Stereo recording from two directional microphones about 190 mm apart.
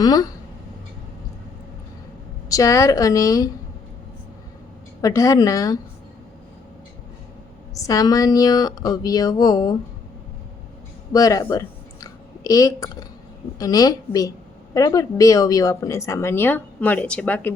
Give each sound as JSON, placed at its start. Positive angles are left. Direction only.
{"t": 0.0, "sound": "speech", "side_deg": 20}
{"t": 2.5, "sound": "a woman's voice", "side_deg": 15}
{"t": 4.9, "sound": "a woman's voice", "side_deg": 15}
{"t": 7.7, "sound": "speech", "side_deg": 15}
{"t": 11.1, "sound": "a woman's voice", "side_deg": 20}